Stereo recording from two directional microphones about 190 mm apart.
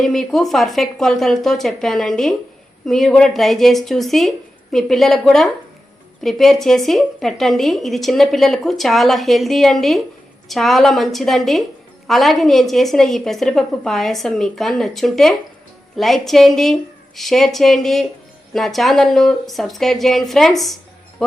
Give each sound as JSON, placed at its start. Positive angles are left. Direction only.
{"t": 0.0, "sound": "a woman's voice", "side_deg": 0}